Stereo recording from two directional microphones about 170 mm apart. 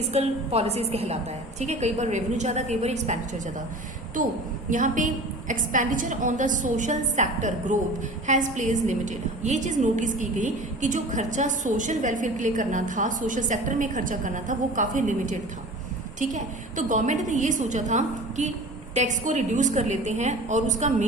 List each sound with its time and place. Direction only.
0.1 s a woman's voice: 35° right (ahead or behind)
4.7 s a woman's voice: 50° right (ahead or behind)